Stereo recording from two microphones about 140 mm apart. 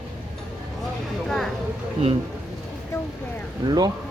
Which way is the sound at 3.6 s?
30° right (ahead or behind).